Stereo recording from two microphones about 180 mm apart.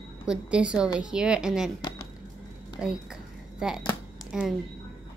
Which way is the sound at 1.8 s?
25° left (ahead or behind).